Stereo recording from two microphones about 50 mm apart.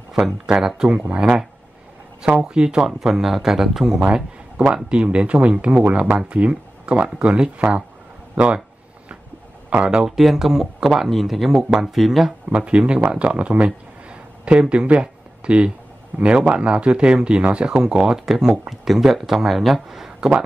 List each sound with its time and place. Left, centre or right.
0.6 s speech: centre
0.8 s speech: right
4.1 s speech: centre
9.8 s speech: centre
12.4 s speech: right